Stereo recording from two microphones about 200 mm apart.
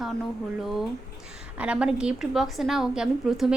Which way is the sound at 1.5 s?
5° right (ahead or behind).